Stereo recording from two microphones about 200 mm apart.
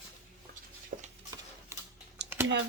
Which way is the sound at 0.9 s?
45° right (ahead or behind).